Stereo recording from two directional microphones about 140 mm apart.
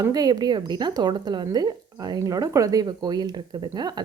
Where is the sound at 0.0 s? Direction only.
30° right (ahead or behind).